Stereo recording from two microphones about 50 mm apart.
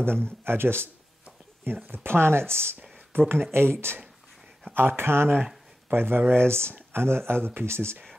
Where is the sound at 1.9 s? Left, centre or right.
Right.